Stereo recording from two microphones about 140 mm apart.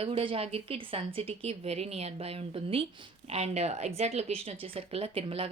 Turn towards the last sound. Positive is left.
turn(degrees=-45)  # may be behind; listen again after turning